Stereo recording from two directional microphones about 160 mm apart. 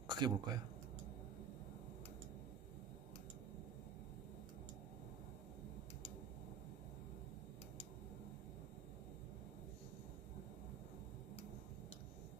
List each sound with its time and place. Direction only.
0.1 s speech: 25° right (ahead or behind)